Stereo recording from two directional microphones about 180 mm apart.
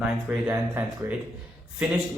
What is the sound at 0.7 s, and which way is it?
Speech, 10° right (ahead or behind).